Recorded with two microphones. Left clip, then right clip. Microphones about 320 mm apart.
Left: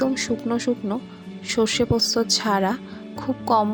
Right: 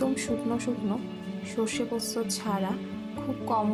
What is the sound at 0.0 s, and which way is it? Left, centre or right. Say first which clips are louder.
A woman's voice: left 5 dB; right.